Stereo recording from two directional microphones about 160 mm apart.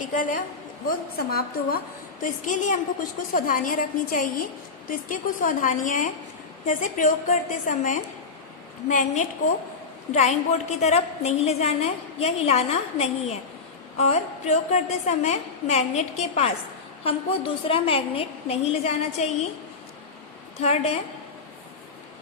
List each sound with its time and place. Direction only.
0.0 s a woman's voice: 55° left (ahead or behind)
0.9 s a woman's voice: 70° left (ahead or behind)
2.2 s a woman's voice: 55° left (ahead or behind)
20.6 s a woman's voice: 40° left (ahead or behind)